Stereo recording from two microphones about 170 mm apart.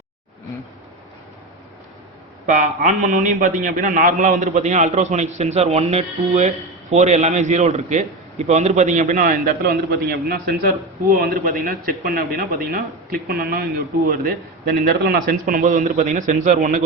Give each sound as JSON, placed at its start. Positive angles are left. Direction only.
{"t": 2.5, "sound": "a man's voice", "side_deg": -45}